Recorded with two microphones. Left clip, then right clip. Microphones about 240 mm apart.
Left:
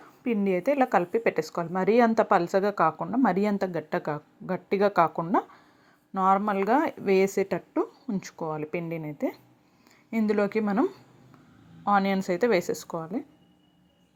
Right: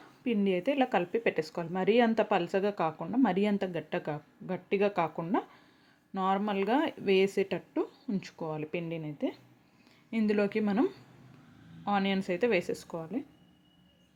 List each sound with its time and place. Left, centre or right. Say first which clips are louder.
0.3 s speech: left 4 dB; centre